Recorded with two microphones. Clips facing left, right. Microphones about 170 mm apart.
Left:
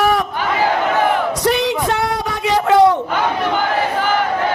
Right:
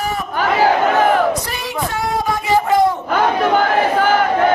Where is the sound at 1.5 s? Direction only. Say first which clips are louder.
Left 6 dB; 75° left (ahead or behind).